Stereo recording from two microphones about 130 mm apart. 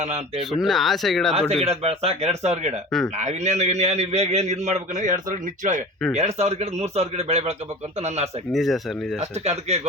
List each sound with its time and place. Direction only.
0.6 s speech: centre (ahead or behind)
1.6 s a man's voice: 50° right (ahead or behind); by 5.8 s 75° right (ahead or behind)
6.1 s a man's voice: 55° right (ahead or behind)
8.5 s speech: centre (ahead or behind)
9.4 s a man's voice: 55° right (ahead or behind)